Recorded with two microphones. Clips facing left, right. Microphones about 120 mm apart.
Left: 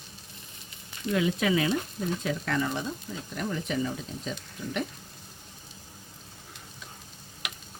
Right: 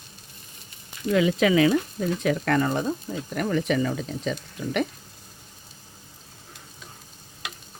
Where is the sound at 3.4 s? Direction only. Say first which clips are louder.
Right 7 dB; 75° right (ahead or behind).